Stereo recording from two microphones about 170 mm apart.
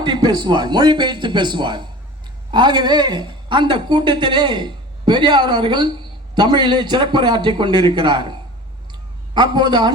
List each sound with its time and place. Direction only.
0.0 s speech: 25° right (ahead or behind)
9.3 s speech: 25° right (ahead or behind)